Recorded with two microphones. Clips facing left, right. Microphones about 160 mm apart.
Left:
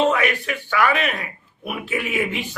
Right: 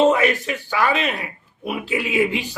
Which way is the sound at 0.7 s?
20° right (ahead or behind).